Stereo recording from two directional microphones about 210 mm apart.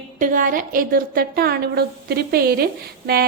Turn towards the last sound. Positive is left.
turn(degrees=-45)  # may be behind; listen again after turning